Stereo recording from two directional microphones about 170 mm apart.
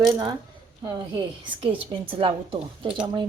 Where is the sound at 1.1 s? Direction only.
30° right (ahead or behind).